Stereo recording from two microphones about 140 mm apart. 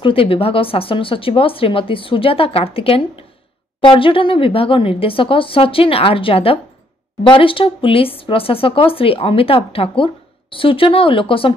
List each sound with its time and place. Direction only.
0.0 s speech: 40° left (ahead or behind)